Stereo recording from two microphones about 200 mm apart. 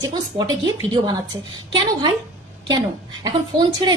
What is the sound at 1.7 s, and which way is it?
Speech, 25° right (ahead or behind).